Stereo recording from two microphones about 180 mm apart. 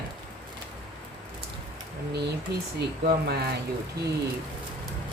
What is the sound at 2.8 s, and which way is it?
Speech, 60° right (ahead or behind).